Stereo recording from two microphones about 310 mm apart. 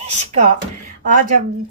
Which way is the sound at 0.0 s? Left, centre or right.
Right.